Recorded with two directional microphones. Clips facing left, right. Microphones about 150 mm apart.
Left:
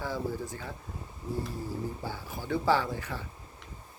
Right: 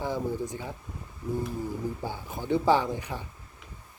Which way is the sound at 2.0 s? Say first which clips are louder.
Right 4 dB; 20° right (ahead or behind).